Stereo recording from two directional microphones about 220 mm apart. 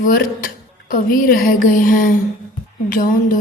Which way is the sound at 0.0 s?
40° left (ahead or behind).